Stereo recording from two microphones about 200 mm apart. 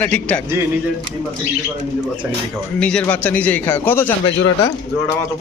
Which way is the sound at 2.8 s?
5° left (ahead or behind).